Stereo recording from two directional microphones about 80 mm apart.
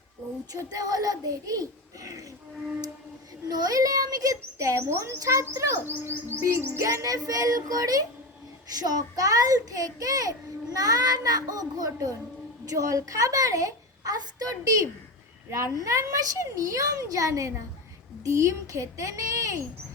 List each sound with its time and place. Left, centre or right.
0.5 s a child's voice: right
3.5 s a child's voice: right
4.5 s a woman's voice: right
15.4 s a woman's voice: right